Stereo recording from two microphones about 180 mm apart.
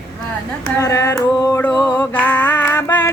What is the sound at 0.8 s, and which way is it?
Carnatic music, 15° left (ahead or behind).